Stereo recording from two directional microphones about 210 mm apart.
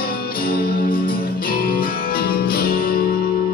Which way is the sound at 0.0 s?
45° left (ahead or behind).